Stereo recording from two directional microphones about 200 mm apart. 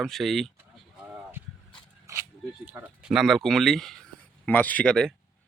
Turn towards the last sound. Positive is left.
turn(degrees=5)  # may be behind; listen again after turning